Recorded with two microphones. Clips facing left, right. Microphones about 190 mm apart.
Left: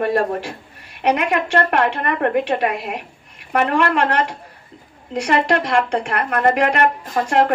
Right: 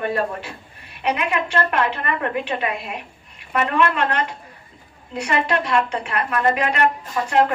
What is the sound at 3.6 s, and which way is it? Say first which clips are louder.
A woman's voice: left 2 dB; 70° left (ahead or behind).